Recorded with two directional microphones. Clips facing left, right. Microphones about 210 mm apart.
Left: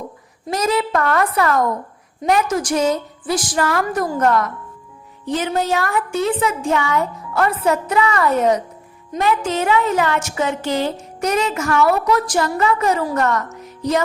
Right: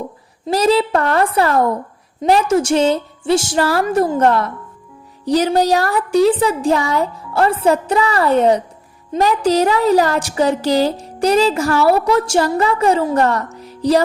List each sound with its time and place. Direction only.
0.4 s a woman's voice: 30° right (ahead or behind)